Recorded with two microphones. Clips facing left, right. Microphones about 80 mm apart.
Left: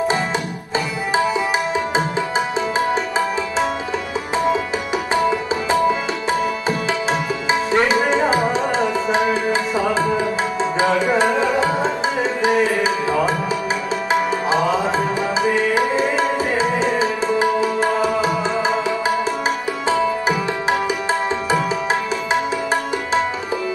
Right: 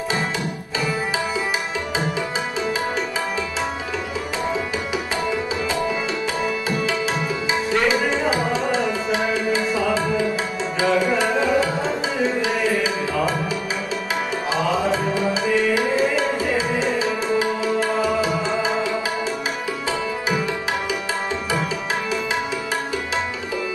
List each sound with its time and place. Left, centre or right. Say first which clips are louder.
7.7 s tabla: left 3 dB; left
9.1 s music: left 2 dB; left
12.4 s tabla: left 4 dB; left
15.4 s tabla: left 3 dB; left
17.4 s music: left 3 dB; left